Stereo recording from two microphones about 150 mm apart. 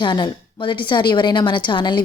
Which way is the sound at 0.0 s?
30° left (ahead or behind).